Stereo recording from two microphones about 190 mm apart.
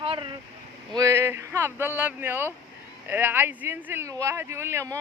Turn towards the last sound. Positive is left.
turn(degrees=-15)  # may be behind; listen again after turning